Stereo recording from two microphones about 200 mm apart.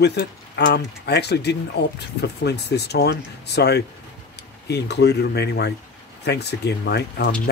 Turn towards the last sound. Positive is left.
turn(degrees=55)  # may be behind; listen again after turning